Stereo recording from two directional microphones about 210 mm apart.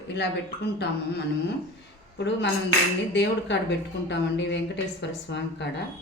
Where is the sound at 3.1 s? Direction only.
55° left (ahead or behind).